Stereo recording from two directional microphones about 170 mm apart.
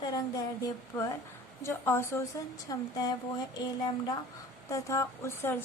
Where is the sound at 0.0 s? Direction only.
25° left (ahead or behind).